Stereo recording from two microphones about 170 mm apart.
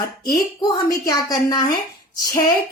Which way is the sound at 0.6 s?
20° left (ahead or behind).